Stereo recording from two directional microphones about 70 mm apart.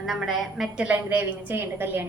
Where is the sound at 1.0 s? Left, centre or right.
Right.